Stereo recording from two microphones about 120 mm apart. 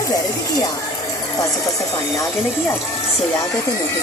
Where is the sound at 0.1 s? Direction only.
30° left (ahead or behind).